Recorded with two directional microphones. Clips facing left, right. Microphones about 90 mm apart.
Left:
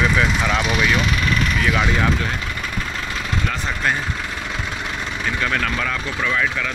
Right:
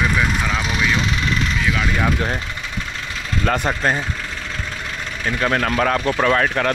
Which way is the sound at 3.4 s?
50° right (ahead or behind).